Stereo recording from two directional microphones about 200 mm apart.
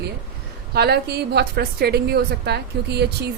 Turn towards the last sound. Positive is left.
turn(degrees=-55)  # may be behind; listen again after turning